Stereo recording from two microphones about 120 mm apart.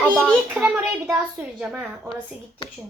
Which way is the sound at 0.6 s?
10° right (ahead or behind).